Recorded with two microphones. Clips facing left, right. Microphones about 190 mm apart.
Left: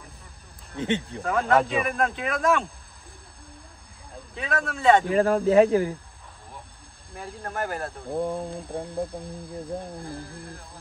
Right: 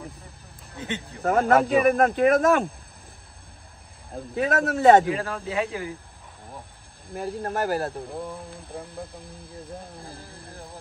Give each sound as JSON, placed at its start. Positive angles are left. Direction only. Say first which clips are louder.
{"t": 0.7, "sound": "speech", "louder": "left 6 dB", "side_deg": 25}
{"t": 1.2, "sound": "a man's voice", "louder": "right 8 dB", "side_deg": -45}
{"t": 1.5, "sound": "a man's voice", "louder": "right 2 dB", "side_deg": -5}
{"t": 1.9, "sound": "speech", "louder": "right 8 dB", "side_deg": -45}
{"t": 4.1, "sound": "a man's voice", "louder": "right 6 dB", "side_deg": -45}
{"t": 5.1, "sound": "speech", "louder": "left 10 dB", "side_deg": 40}
{"t": 7.2, "sound": "speech", "louder": "right 5 dB", "side_deg": -40}
{"t": 8.2, "sound": "speech", "louder": "left 7 dB", "side_deg": 25}